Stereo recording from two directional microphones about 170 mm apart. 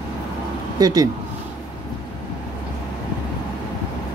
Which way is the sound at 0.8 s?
20° right (ahead or behind).